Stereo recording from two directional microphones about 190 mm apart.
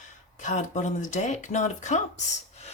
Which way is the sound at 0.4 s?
40° left (ahead or behind).